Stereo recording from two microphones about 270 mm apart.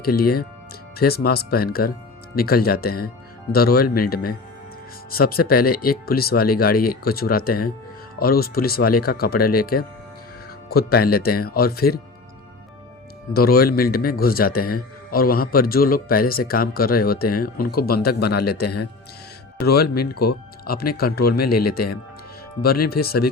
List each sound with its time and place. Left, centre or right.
0.2 s a man's voice: left
13.3 s a man's voice: left